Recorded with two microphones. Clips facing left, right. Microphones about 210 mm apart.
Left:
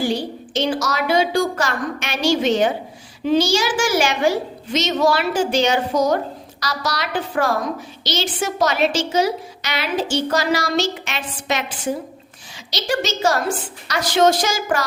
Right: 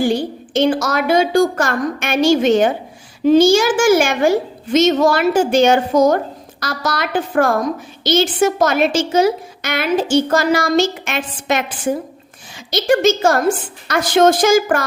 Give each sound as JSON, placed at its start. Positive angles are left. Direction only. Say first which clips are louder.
{"t": 0.0, "sound": "a woman's voice", "louder": "right 5 dB", "side_deg": -50}
{"t": 12.7, "sound": "a woman's voice", "louder": "right 9 dB", "side_deg": -50}